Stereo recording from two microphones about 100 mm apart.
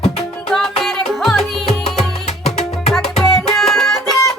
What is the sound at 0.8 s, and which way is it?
Music, centre (ahead or behind).